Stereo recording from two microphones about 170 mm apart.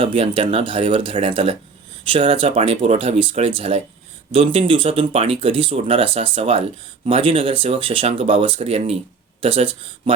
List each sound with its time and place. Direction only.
0.0 s speech: 30° right (ahead or behind)